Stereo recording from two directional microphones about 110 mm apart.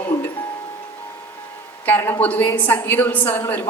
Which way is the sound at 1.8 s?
15° left (ahead or behind).